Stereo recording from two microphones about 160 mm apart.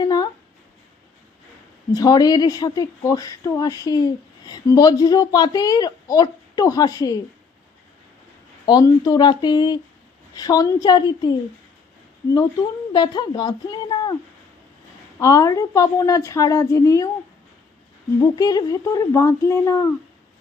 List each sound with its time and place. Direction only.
0.0 s a sound: 25° left (ahead or behind)
1.9 s speech: 25° left (ahead or behind)
8.6 s speech: 25° left (ahead or behind)
12.9 s speech: 25° left (ahead or behind)
15.2 s speech: 20° left (ahead or behind)
18.2 s speech: 20° left (ahead or behind)